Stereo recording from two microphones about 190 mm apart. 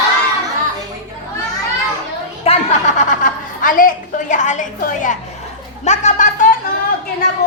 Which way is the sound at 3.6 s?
45° left (ahead or behind).